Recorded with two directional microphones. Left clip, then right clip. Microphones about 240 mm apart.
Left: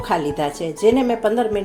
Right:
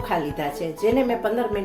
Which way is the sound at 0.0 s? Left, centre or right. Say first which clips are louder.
Left 4 dB; left.